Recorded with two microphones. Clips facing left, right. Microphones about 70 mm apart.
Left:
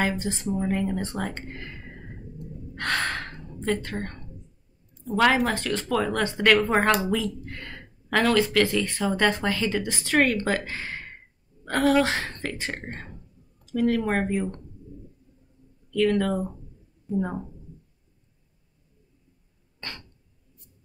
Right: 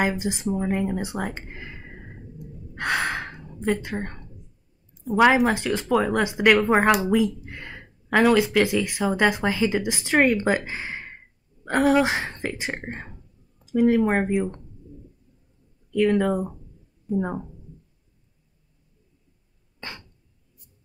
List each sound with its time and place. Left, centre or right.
0.0 s speech: centre
15.9 s speech: centre
19.8 s cough: centre